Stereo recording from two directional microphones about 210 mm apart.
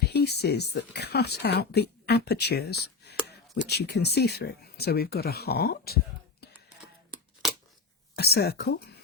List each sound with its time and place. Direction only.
0.0 s speech: 50° left (ahead or behind)
8.1 s speech: 50° left (ahead or behind)